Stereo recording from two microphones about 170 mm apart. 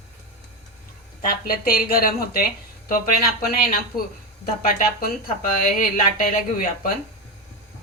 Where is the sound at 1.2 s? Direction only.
60° left (ahead or behind).